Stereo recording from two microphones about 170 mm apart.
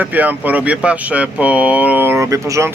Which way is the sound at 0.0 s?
10° right (ahead or behind).